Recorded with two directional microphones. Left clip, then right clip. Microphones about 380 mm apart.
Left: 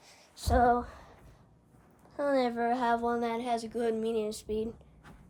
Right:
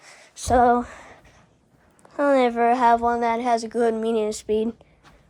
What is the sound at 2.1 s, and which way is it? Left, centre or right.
A woman's voice, right.